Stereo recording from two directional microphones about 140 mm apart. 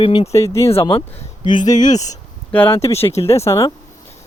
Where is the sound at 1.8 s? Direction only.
65° left (ahead or behind).